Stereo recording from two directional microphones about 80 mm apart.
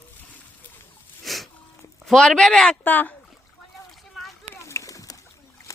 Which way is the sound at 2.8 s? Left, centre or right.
Left.